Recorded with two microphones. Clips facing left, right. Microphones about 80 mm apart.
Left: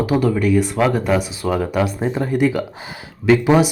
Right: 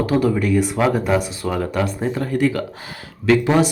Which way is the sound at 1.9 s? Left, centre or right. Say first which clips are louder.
Left 2 dB; centre.